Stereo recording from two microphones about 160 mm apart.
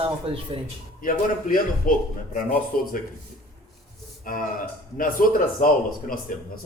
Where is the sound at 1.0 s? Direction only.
60° left (ahead or behind).